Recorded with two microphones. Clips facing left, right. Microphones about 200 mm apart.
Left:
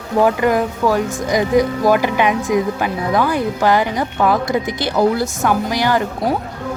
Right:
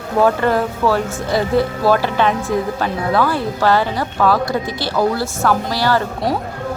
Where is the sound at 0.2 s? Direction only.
15° left (ahead or behind).